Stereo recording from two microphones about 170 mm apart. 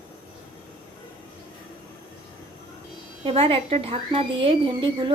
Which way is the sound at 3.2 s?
35° right (ahead or behind).